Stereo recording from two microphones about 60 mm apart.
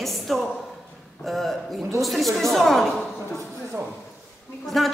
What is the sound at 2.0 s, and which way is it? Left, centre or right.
Speech, centre.